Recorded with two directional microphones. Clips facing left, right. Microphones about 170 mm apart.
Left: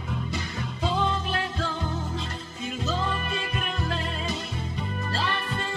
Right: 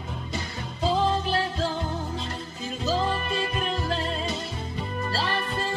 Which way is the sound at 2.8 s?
35° right (ahead or behind).